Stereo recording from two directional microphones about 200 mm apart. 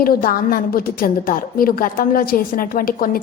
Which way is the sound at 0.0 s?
45° left (ahead or behind).